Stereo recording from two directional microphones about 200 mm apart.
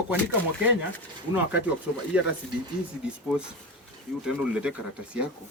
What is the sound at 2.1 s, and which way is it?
Speech, 5° right (ahead or behind).